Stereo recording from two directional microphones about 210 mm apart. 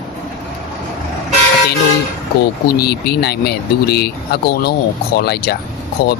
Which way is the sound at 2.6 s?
50° left (ahead or behind).